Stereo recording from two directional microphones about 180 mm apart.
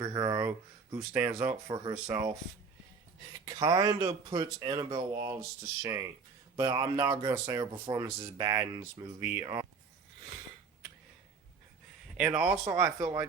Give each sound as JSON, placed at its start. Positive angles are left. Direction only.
{"t": 0.0, "sound": "speech", "side_deg": -15}
{"t": 1.6, "sound": "speech", "side_deg": -25}
{"t": 3.4, "sound": "speech", "side_deg": -25}
{"t": 12.1, "sound": "speech", "side_deg": -5}